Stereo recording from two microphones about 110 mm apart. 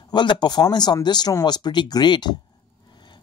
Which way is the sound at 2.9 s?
45° left (ahead or behind).